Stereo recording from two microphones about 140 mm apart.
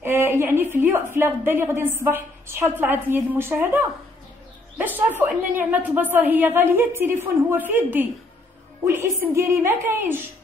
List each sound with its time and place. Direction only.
0.0 s a woman's voice: 15° right (ahead or behind)